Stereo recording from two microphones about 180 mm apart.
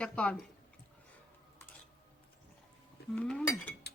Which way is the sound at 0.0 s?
5° left (ahead or behind).